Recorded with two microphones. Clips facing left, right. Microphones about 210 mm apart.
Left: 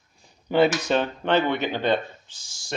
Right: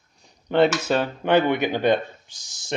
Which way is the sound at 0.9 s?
10° right (ahead or behind).